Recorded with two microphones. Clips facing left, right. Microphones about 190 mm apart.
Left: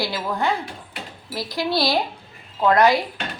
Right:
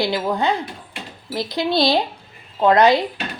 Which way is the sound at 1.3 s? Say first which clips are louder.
Right 3 dB; 20° right (ahead or behind).